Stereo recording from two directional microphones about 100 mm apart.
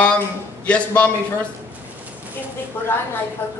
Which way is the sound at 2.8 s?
20° left (ahead or behind).